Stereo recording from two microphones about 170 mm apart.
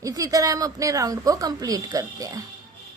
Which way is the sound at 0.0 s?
20° right (ahead or behind).